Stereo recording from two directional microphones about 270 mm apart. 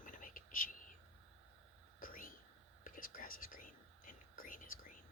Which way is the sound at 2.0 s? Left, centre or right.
Left.